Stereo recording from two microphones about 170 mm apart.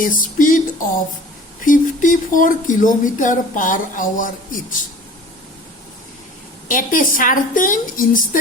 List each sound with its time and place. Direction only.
0.0 s a sound: 55° left (ahead or behind)
1.6 s speech: 50° left (ahead or behind)
6.7 s speech: 50° left (ahead or behind)